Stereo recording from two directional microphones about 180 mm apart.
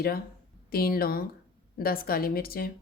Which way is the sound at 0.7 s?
55° left (ahead or behind).